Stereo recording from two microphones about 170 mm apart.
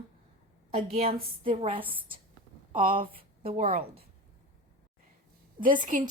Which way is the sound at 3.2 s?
35° right (ahead or behind).